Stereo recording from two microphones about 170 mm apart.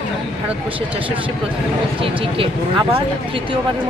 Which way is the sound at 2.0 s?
35° right (ahead or behind).